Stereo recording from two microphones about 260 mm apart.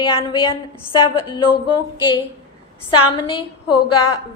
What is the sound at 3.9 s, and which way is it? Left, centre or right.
Speech, left.